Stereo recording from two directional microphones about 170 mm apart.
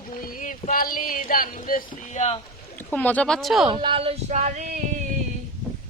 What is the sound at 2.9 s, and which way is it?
Speech, 10° left (ahead or behind).